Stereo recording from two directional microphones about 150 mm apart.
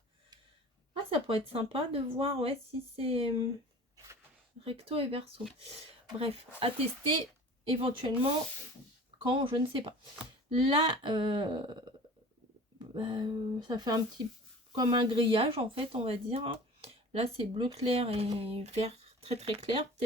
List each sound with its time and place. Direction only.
1.1 s speech: 40° right (ahead or behind)
4.6 s speech: 40° right (ahead or behind)
12.9 s speech: 30° right (ahead or behind)